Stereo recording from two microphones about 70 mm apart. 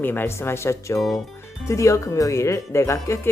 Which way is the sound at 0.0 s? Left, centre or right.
Left.